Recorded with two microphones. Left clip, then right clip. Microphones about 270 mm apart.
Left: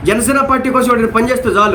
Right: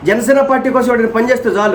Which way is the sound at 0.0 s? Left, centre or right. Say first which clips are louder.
Right 2 dB; centre.